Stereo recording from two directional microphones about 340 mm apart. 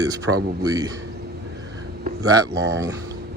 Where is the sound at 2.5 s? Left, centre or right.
Right.